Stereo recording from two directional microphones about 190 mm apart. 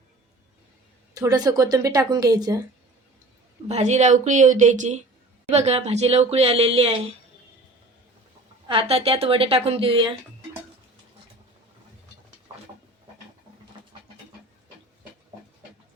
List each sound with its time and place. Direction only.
1.1 s a woman's voice: 15° right (ahead or behind)
3.7 s speech: 35° right (ahead or behind)
8.6 s a woman's voice: 30° right (ahead or behind)